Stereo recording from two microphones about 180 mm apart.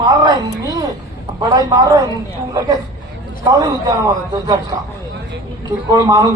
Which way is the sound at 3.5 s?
20° right (ahead or behind).